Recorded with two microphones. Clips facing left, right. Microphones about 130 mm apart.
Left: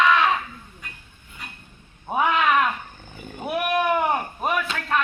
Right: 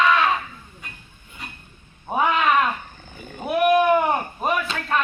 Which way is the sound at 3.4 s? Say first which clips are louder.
Right 5 dB; 5° left (ahead or behind).